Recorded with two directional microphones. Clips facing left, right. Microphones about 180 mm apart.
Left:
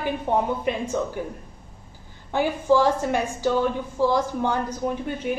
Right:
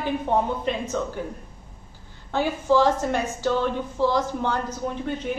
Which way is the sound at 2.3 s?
15° left (ahead or behind).